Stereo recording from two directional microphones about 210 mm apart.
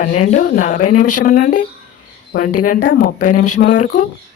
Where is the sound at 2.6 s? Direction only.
40° left (ahead or behind).